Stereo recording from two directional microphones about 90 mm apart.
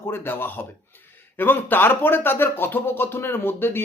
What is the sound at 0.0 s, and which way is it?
Speech, 25° left (ahead or behind).